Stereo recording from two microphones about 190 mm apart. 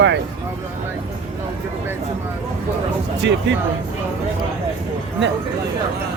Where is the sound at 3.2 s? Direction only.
70° right (ahead or behind).